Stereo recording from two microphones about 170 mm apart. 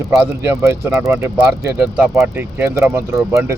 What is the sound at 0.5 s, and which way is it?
Speech, 15° right (ahead or behind).